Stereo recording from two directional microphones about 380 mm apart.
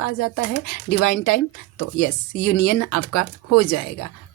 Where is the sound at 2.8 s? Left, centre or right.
Left.